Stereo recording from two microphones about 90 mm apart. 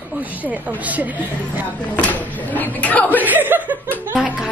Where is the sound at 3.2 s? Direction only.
20° right (ahead or behind).